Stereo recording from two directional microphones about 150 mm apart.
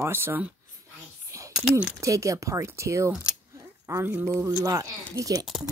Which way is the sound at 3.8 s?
25° right (ahead or behind).